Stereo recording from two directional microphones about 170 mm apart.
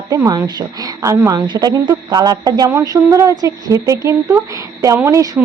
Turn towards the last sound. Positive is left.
turn(degrees=-20)  # may be behind; listen again after turning